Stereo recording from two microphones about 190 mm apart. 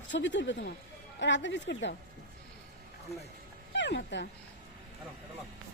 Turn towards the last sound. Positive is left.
turn(degrees=65)  # may be behind; listen again after turning